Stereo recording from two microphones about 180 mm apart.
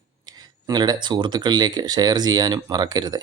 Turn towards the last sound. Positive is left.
turn(degrees=-20)  # may be behind; listen again after turning